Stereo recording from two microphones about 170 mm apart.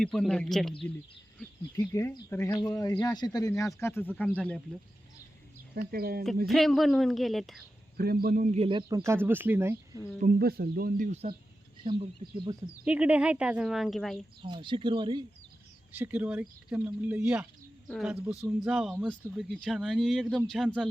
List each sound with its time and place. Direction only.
0.0 s speech: 5° left (ahead or behind)
1.7 s speech: 20° left (ahead or behind)
3.8 s speech: 15° left (ahead or behind)
5.9 s speech: 60° right (ahead or behind)
6.5 s speech: centre (ahead or behind)
7.9 s speech: 65° right (ahead or behind)
8.5 s speech: 35° right (ahead or behind)
9.0 s speech: 10° right (ahead or behind)
10.2 s speech: 60° right (ahead or behind)
11.8 s speech: 30° right (ahead or behind)
12.8 s speech: 5° right (ahead or behind)
14.4 s speech: 30° right (ahead or behind)
15.9 s speech: 10° right (ahead or behind)
17.8 s speech: centre (ahead or behind)